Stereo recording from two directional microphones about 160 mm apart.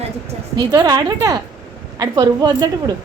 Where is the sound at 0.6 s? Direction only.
25° right (ahead or behind).